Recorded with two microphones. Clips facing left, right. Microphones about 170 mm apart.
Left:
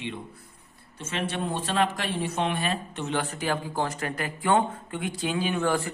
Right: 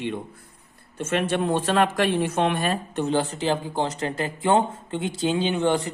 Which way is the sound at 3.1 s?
25° right (ahead or behind).